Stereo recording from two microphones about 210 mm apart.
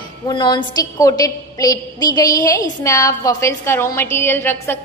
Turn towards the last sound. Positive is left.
turn(degrees=10)  # may be behind; listen again after turning